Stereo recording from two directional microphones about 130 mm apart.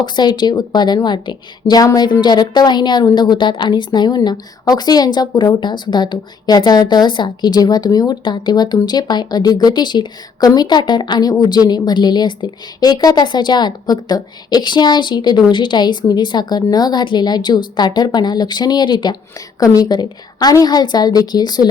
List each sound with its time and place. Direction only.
0.0 s a woman's voice: 35° left (ahead or behind)